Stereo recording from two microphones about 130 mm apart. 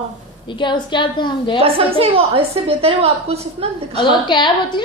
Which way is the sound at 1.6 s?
45° right (ahead or behind).